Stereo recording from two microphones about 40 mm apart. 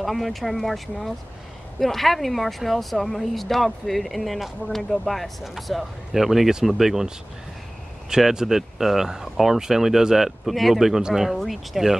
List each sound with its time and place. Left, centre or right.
0.0 s speech: centre
8.2 s speech: centre
11.0 s speech: centre
11.3 s speech: centre